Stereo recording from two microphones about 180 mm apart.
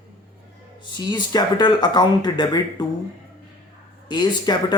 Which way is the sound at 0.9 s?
20° left (ahead or behind).